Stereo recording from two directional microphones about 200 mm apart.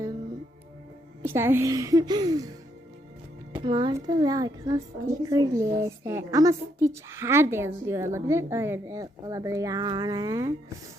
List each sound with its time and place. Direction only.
1.2 s a woman's voice: 10° right (ahead or behind)